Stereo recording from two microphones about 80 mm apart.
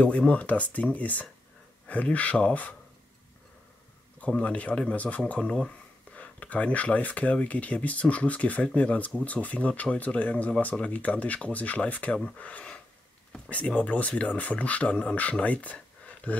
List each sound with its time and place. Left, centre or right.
0.0 s speech: centre
4.2 s speech: centre